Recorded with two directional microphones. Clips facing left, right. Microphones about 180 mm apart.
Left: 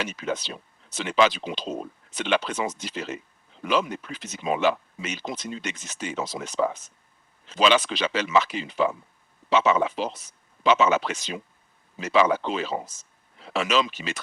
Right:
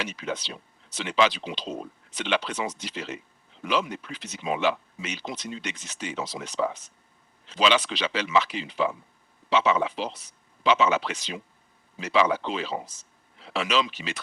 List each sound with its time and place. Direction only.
0.0 s speech: 45° left (ahead or behind)